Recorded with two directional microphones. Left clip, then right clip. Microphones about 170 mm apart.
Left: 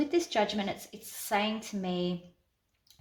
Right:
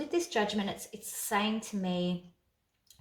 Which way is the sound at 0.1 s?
35° left (ahead or behind).